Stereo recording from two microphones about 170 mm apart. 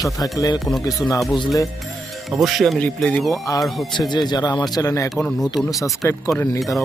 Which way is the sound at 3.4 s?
20° left (ahead or behind).